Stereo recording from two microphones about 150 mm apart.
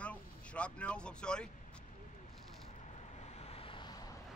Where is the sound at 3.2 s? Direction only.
45° left (ahead or behind); by 4.1 s 25° left (ahead or behind).